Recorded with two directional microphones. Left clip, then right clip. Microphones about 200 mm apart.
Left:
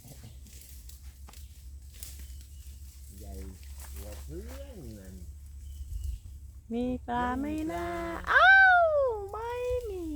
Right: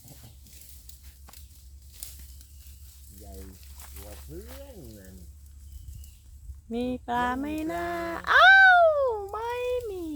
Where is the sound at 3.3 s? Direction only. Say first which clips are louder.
Right 2 dB; 30° right (ahead or behind).